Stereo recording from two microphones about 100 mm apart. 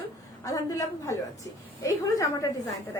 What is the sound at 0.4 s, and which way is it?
A woman's voice, 35° left (ahead or behind).